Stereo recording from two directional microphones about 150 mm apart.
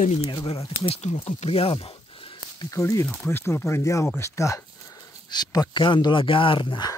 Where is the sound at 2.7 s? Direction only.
20° left (ahead or behind).